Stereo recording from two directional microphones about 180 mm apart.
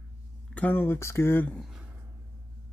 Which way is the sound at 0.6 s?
10° left (ahead or behind).